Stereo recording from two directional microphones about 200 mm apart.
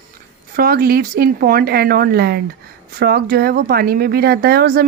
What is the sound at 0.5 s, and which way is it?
Speech, 50° right (ahead or behind).